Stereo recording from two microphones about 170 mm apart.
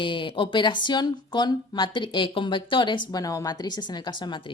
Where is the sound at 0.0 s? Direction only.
30° left (ahead or behind).